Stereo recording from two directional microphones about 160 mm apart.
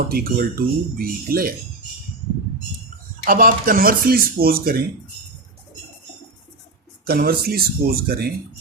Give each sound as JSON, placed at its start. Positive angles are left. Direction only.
{"t": 0.1, "sound": "speech", "side_deg": -70}
{"t": 3.2, "sound": "speech", "side_deg": -65}
{"t": 7.1, "sound": "speech", "side_deg": -70}